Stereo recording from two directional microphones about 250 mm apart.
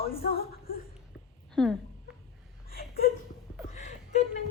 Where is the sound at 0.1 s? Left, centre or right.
Left.